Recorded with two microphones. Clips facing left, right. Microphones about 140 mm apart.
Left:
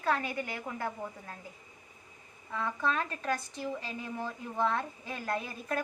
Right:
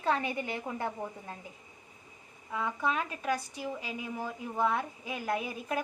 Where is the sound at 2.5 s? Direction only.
10° right (ahead or behind).